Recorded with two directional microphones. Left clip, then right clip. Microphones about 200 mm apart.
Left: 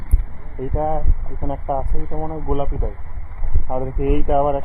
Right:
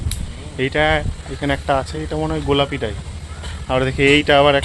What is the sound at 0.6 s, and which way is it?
Speech, 30° right (ahead or behind).